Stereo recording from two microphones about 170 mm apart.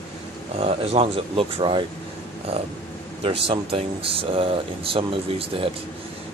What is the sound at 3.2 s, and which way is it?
Speech, 35° right (ahead or behind).